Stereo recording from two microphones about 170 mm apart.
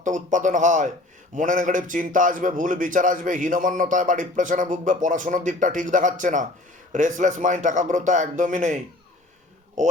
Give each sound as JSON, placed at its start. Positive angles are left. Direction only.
{"t": 0.0, "sound": "speech", "side_deg": -50}